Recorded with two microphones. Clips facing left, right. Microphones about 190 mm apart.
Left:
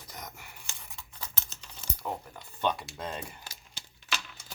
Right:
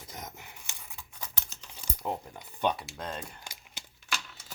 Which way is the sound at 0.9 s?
15° right (ahead or behind).